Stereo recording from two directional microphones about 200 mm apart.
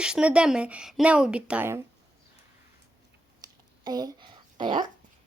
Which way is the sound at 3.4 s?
20° right (ahead or behind).